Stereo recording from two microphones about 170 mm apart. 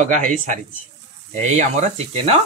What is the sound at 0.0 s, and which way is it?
A man's voice, 50° right (ahead or behind).